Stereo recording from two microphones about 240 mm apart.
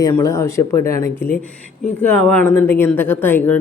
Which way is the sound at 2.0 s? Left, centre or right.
Centre.